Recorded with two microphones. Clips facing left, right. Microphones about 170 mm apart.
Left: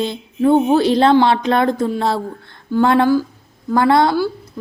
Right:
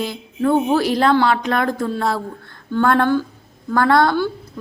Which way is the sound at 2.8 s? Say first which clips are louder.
Left 3 dB; 15° left (ahead or behind).